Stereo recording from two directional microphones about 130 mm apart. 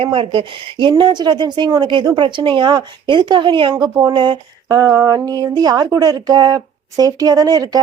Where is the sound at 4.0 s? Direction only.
35° right (ahead or behind).